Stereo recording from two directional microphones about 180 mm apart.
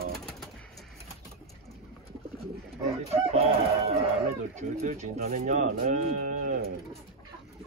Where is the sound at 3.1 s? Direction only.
35° right (ahead or behind).